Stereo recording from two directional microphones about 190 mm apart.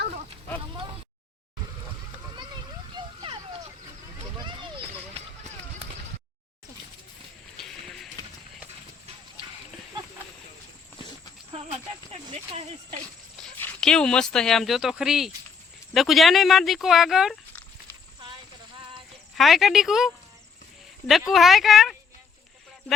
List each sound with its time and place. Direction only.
2.9 s vehicle: 25° right (ahead or behind)
4.4 s a sound: 25° right (ahead or behind)
7.5 s a sound: centre (ahead or behind)
13.4 s speech: 5° left (ahead or behind)
19.4 s speech: centre (ahead or behind)
21.1 s speech: centre (ahead or behind)